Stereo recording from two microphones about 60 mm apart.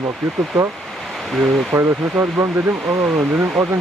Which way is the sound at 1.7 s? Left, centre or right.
Right.